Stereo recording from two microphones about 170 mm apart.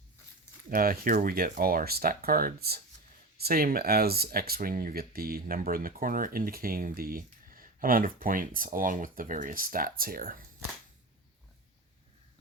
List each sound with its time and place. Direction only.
0.7 s speech: 55° right (ahead or behind)